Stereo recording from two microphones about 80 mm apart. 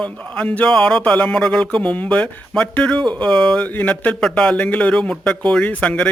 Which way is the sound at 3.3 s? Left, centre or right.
Centre.